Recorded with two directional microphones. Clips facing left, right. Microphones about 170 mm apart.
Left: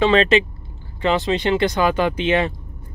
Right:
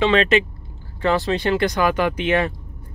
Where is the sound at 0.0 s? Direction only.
35° left (ahead or behind).